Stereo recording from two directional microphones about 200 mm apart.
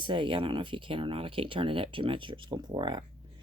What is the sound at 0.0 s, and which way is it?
A woman's voice, 25° right (ahead or behind).